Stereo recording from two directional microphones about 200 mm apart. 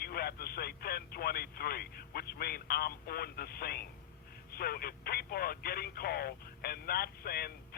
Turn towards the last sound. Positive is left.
turn(degrees=50)  # may be behind; listen again after turning